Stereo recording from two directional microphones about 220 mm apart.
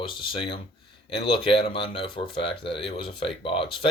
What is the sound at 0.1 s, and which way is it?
Speech, 25° left (ahead or behind).